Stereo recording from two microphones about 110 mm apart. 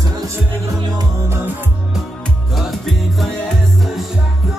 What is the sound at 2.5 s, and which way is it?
Music, centre (ahead or behind).